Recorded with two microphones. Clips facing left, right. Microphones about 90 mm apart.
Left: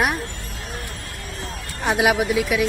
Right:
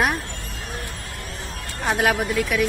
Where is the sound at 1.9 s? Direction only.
5° left (ahead or behind).